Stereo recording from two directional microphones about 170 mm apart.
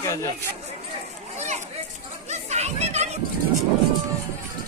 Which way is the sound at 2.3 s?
40° right (ahead or behind).